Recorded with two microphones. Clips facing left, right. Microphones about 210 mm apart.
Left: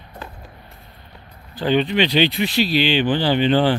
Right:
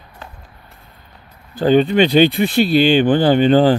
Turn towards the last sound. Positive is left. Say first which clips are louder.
# right 5 dB
turn(degrees=-40)  # may be behind; listen again after turning